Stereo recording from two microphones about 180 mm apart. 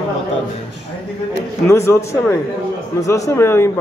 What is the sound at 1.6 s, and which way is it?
A man's voice, 15° left (ahead or behind).